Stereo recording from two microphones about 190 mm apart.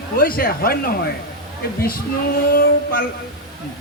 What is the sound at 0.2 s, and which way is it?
Speech, 50° left (ahead or behind).